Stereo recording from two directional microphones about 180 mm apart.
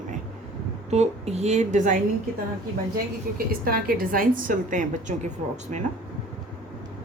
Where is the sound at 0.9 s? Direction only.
35° right (ahead or behind).